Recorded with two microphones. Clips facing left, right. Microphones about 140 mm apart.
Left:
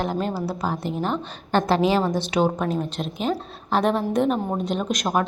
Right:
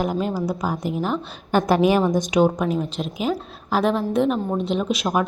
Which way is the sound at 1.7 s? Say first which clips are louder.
Right 3 dB; 15° right (ahead or behind).